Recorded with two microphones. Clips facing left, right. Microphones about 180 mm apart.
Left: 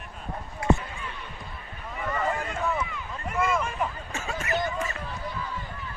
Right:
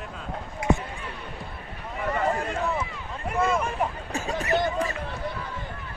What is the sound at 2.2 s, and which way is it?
Run, 30° right (ahead or behind).